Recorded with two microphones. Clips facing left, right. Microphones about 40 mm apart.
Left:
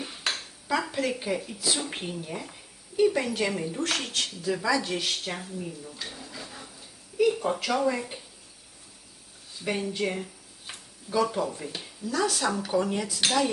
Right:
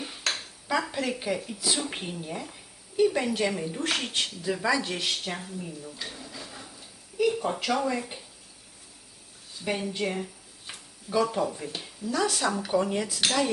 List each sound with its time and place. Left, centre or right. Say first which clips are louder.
0.0 s a woman's voice: even; centre
3.8 s speech: right 1 dB; centre
4.9 s speech: even; centre
9.6 s a woman's voice: left 1 dB; centre